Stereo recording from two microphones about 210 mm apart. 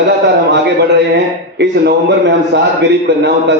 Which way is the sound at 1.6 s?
55° right (ahead or behind).